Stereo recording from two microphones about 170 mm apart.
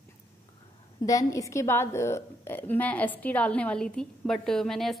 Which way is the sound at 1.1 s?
20° left (ahead or behind).